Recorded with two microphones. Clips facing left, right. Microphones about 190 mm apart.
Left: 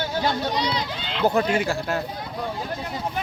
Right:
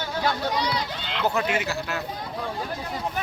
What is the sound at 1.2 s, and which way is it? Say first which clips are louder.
Speech: left 4 dB; 35° left (ahead or behind).